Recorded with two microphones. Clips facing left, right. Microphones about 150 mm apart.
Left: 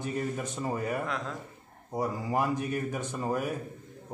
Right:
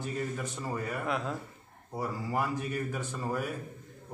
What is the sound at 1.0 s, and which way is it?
Speech, 5° right (ahead or behind).